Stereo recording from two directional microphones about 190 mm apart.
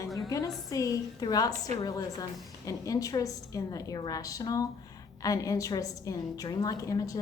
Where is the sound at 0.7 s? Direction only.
20° left (ahead or behind).